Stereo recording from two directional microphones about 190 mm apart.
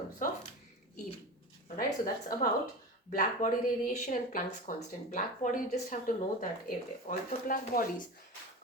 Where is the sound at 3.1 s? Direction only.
45° left (ahead or behind).